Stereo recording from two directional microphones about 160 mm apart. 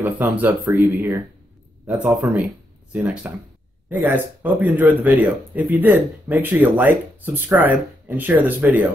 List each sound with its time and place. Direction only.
0.0 s speech: 10° right (ahead or behind)